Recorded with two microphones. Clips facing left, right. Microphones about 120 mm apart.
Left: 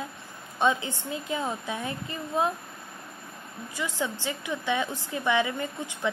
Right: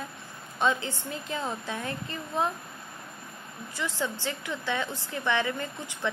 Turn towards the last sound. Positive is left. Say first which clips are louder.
# left 1 dB
turn(degrees=15)  # may be behind; listen again after turning